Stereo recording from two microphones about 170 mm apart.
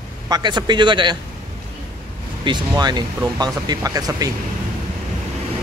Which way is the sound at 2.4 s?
25° right (ahead or behind).